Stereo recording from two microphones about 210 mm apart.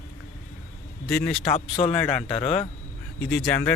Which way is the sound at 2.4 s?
30° left (ahead or behind).